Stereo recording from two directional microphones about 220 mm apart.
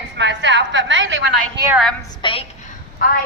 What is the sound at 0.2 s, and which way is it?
A woman's voice, 55° right (ahead or behind).